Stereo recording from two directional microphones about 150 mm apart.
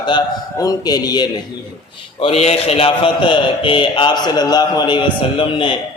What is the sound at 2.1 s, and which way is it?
A man's voice, 40° left (ahead or behind).